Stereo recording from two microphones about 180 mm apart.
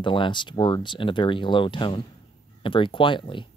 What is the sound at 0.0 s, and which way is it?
Speech, 25° left (ahead or behind).